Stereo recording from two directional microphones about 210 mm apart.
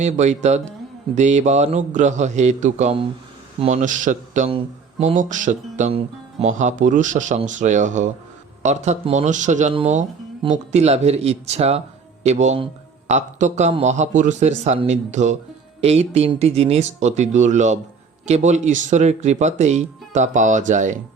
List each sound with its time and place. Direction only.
0.0 s speech: 35° right (ahead or behind)